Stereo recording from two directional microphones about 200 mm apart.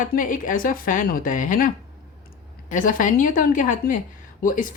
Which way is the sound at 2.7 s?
40° left (ahead or behind).